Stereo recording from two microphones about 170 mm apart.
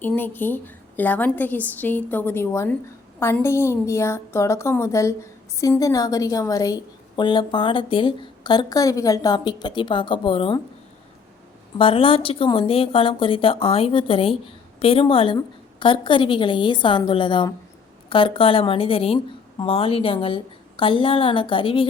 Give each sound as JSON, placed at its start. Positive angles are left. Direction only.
{"t": 0.0, "sound": "a woman's voice", "side_deg": 10}
{"t": 11.8, "sound": "a woman's voice", "side_deg": 30}